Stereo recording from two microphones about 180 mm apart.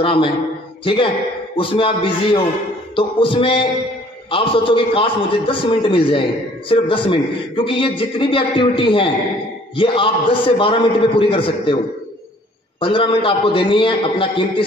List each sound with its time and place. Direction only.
0.0 s a man's voice: 30° left (ahead or behind)
12.8 s a man's voice: 30° left (ahead or behind)